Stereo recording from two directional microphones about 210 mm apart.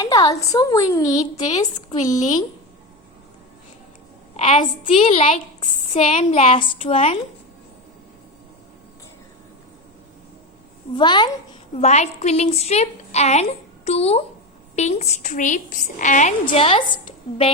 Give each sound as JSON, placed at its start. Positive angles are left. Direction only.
{"t": 0.0, "sound": "a woman's voice", "side_deg": 15}
{"t": 2.0, "sound": "a woman's voice", "side_deg": 35}
{"t": 4.4, "sound": "a woman's voice", "side_deg": 30}
{"t": 10.9, "sound": "a woman's voice", "side_deg": 20}
{"t": 11.8, "sound": "a woman's voice", "side_deg": 30}
{"t": 16.5, "sound": "a woman's voice", "side_deg": 25}